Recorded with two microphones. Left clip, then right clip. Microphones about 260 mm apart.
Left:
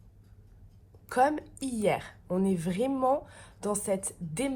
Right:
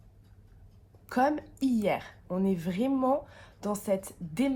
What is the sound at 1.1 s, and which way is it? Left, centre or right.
A woman's voice, left.